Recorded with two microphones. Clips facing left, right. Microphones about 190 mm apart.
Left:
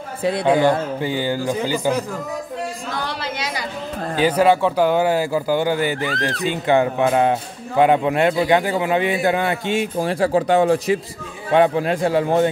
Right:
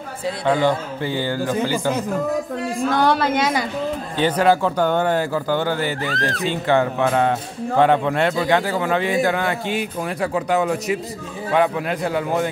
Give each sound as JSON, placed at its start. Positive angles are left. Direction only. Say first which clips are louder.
{"t": 0.5, "sound": "speech", "louder": "left 2 dB", "side_deg": 15}
{"t": 2.8, "sound": "a woman's voice", "louder": "right 9 dB", "side_deg": -55}
{"t": 4.2, "sound": "a man's voice", "louder": "left 2 dB", "side_deg": 5}